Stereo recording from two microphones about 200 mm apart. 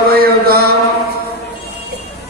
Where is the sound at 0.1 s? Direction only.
50° right (ahead or behind).